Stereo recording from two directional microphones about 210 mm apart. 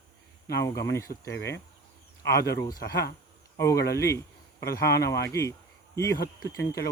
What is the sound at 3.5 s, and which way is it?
Speech, 15° left (ahead or behind).